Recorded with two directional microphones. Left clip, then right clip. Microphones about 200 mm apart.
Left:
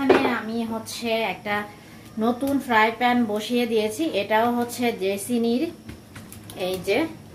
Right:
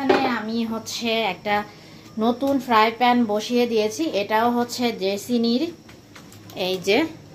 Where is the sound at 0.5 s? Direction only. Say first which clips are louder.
Right 2 dB; 35° right (ahead or behind); by 5.4 s 20° right (ahead or behind).